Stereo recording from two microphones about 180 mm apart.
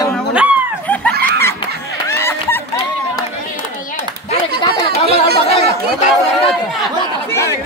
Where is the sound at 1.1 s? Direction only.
65° right (ahead or behind).